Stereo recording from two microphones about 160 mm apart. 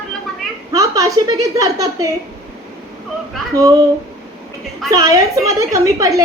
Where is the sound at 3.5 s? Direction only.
20° right (ahead or behind).